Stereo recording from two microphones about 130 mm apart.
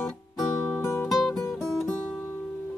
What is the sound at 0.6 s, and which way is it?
Music, 15° left (ahead or behind).